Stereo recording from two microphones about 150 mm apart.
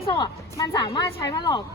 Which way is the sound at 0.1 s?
25° left (ahead or behind).